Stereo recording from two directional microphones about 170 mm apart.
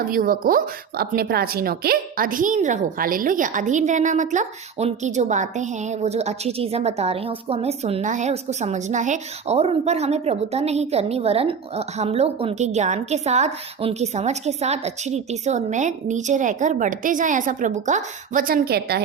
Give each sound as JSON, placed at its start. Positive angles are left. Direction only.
{"t": 0.0, "sound": "a woman's voice", "side_deg": -55}